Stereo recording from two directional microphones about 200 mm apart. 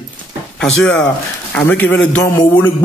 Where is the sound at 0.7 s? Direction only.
75° left (ahead or behind).